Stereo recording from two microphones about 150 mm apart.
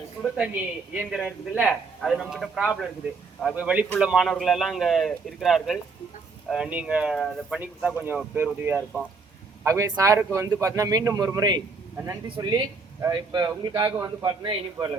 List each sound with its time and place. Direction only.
0.2 s a man's voice: 5° right (ahead or behind); by 14.8 s 30° right (ahead or behind)